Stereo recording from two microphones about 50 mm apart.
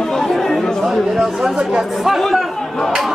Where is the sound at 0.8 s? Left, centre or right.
Centre.